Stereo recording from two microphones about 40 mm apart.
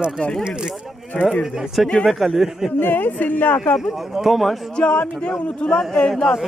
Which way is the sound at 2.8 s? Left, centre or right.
Left.